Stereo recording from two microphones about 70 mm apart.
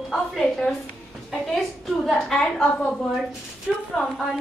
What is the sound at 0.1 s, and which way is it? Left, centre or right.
A woman's voice, centre.